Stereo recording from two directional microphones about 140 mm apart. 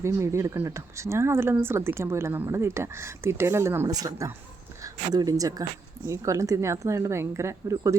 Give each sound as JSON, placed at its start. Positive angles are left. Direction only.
{"t": 0.0, "sound": "speech", "side_deg": -20}